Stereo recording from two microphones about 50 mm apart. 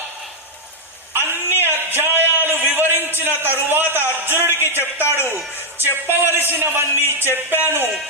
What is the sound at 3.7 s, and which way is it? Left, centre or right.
A man's voice, right.